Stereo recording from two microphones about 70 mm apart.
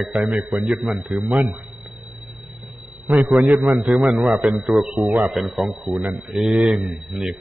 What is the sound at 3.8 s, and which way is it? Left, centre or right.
A man's voice, centre.